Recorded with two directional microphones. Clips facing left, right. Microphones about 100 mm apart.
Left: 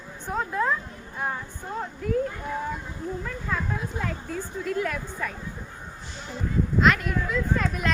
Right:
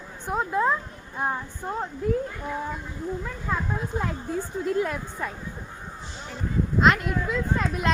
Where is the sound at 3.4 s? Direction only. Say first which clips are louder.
Right 2 dB; 20° right (ahead or behind).